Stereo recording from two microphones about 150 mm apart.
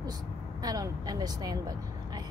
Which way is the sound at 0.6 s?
25° right (ahead or behind).